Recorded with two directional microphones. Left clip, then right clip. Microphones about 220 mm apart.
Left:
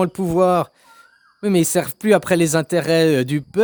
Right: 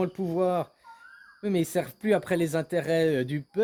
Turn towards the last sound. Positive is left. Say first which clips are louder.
# left 9 dB
turn(degrees=50)  # may be behind; listen again after turning